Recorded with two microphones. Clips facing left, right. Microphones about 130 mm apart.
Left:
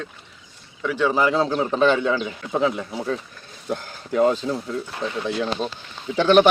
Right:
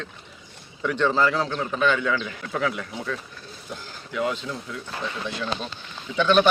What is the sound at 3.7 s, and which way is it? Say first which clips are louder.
Speech: left 9 dB; 50° left (ahead or behind).